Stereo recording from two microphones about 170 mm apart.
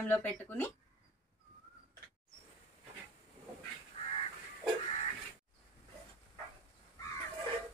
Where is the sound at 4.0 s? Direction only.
35° left (ahead or behind).